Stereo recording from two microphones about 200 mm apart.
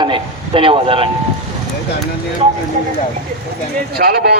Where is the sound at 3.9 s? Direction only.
50° right (ahead or behind).